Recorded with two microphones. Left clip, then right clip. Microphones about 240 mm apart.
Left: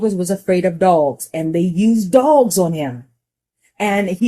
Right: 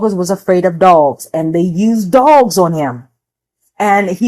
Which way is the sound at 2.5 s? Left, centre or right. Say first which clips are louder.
Right 6 dB; centre.